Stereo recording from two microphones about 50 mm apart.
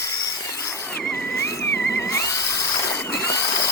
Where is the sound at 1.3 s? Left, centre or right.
Left.